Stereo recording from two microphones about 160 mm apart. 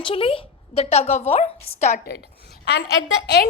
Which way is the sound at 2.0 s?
85° left.